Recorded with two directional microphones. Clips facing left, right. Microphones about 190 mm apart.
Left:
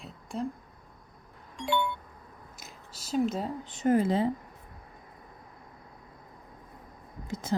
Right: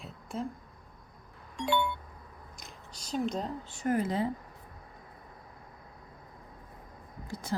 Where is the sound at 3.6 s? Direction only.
20° left (ahead or behind).